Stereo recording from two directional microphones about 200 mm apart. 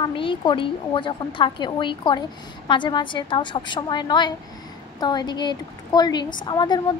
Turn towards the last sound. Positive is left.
turn(degrees=20)  # may be behind; listen again after turning